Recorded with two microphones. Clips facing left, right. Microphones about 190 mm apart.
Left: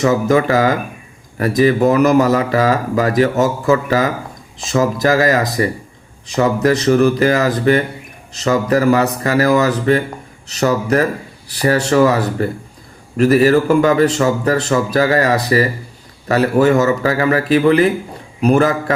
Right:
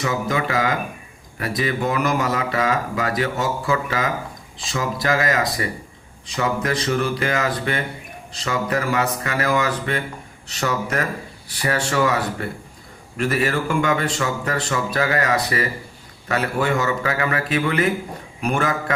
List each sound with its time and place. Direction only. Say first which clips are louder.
0.0 s speech: left 9 dB; 40° left (ahead or behind)